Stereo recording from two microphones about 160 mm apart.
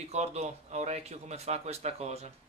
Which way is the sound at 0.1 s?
40° right (ahead or behind).